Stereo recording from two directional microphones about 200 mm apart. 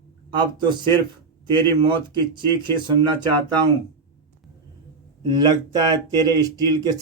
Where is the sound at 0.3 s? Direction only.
25° right (ahead or behind).